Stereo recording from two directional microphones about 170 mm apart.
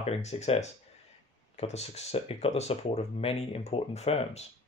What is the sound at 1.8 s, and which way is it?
Speech, 40° left (ahead or behind).